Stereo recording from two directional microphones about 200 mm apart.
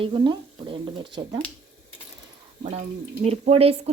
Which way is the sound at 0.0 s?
25° right (ahead or behind).